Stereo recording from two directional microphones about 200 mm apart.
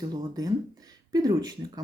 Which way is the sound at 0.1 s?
20° right (ahead or behind).